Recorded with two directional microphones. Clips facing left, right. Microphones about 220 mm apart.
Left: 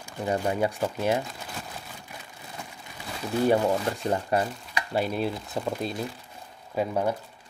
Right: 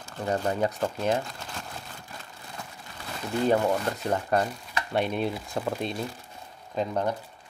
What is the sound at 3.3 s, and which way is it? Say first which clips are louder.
Speech: left 1 dB; 10° left (ahead or behind).